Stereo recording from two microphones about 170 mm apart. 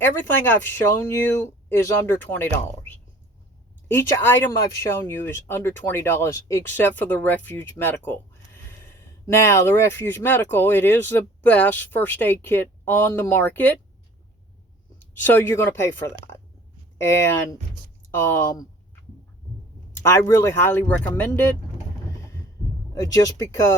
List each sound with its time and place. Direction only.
0.0 s speech: 10° left (ahead or behind)
9.3 s speech: 15° left (ahead or behind)
14.9 s speech: 10° left (ahead or behind)
19.9 s speech: 15° left (ahead or behind)
23.0 s speech: 20° left (ahead or behind)